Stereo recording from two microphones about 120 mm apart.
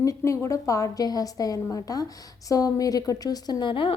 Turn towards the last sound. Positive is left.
turn(degrees=45)  # may be behind; listen again after turning